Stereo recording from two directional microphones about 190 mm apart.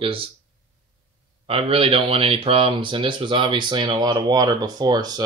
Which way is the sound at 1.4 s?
30° right (ahead or behind).